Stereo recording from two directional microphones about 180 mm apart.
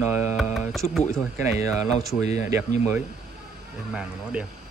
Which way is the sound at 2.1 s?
40° left (ahead or behind).